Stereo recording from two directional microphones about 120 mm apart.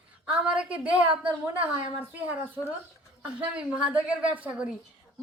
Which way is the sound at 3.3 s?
10° right (ahead or behind).